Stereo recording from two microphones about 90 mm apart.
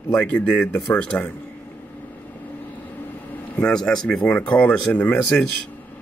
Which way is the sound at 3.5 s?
10° left (ahead or behind).